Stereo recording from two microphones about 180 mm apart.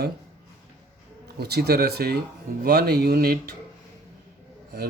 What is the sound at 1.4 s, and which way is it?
Speech, 60° right (ahead or behind).